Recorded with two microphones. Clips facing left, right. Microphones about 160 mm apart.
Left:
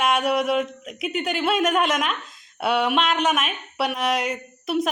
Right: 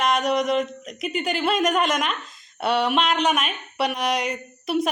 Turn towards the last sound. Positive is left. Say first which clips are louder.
# even
turn(degrees=0)  # may be behind; listen again after turning